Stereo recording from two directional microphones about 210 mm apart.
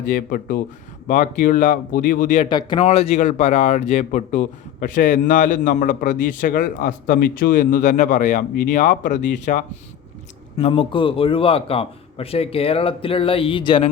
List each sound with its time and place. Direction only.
0.0 s speech: 40° left (ahead or behind)
2.5 s speech: 20° left (ahead or behind); by 9.6 s 35° left (ahead or behind)
10.6 s a man's voice: 25° left (ahead or behind)